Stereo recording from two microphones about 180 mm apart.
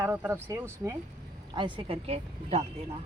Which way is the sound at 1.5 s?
25° right (ahead or behind).